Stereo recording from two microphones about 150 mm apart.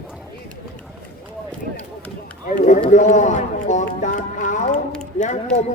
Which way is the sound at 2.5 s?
55° left (ahead or behind).